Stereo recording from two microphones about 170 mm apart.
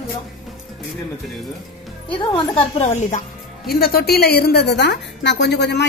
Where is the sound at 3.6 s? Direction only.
65° left (ahead or behind).